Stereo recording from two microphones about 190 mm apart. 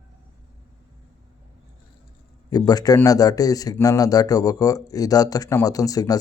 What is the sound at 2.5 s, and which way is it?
A man's voice, 20° left (ahead or behind).